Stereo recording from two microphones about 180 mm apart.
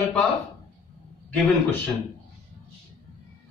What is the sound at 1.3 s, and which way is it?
Speech, 10° left (ahead or behind).